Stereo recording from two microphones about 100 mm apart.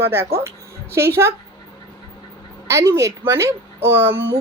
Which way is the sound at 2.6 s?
30° right (ahead or behind).